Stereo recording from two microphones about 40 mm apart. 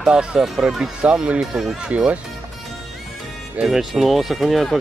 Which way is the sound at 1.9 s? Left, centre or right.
Right.